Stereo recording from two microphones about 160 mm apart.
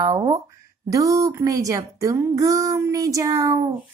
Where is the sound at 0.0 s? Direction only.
25° right (ahead or behind).